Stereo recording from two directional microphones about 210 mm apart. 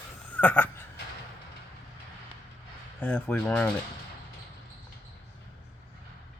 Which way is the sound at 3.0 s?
5° left (ahead or behind).